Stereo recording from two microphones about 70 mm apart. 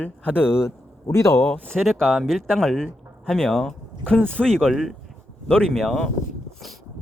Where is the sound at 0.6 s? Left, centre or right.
Left.